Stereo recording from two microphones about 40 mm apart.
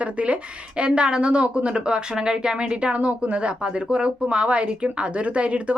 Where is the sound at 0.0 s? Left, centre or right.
Right.